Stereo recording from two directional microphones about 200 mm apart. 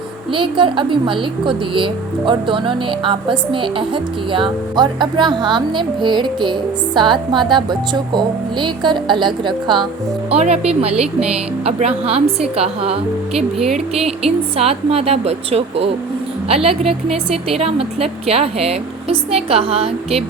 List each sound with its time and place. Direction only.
0.3 s a woman's voice: 25° right (ahead or behind)
13.3 s speech: centre (ahead or behind)
13.7 s a woman's voice: 30° right (ahead or behind)